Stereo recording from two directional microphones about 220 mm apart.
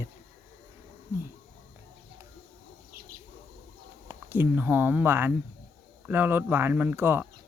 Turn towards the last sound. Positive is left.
turn(degrees=-10)  # may be behind; listen again after turning